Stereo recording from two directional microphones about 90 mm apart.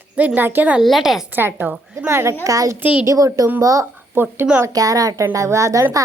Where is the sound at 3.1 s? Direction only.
40° right (ahead or behind).